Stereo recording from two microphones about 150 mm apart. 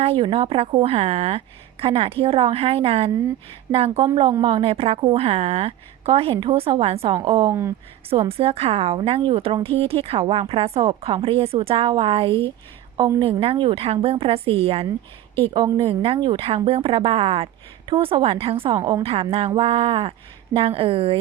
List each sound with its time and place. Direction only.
0.0 s a woman's voice: 35° right (ahead or behind)
7.2 s a woman's voice: 30° right (ahead or behind)
8.1 s a woman's voice: 40° right (ahead or behind)
18.8 s a woman's voice: 25° right (ahead or behind)
19.0 s a woman's voice: 40° right (ahead or behind)